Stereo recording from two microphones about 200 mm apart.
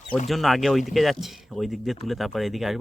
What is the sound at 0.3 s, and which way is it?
Speech, centre (ahead or behind).